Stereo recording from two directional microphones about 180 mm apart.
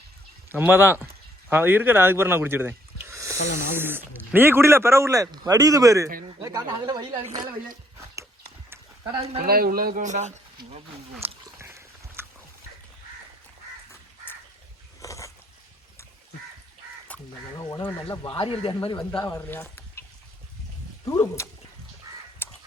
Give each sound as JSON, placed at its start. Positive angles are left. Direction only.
{"t": 0.5, "sound": "a man's voice", "side_deg": -10}
{"t": 9.5, "sound": "speech", "side_deg": -55}
{"t": 11.6, "sound": "a sound", "side_deg": -15}
{"t": 15.0, "sound": "a sound", "side_deg": 15}
{"t": 17.6, "sound": "speech", "side_deg": 20}
{"t": 18.9, "sound": "speech", "side_deg": 20}
{"t": 22.4, "sound": "crow", "side_deg": 10}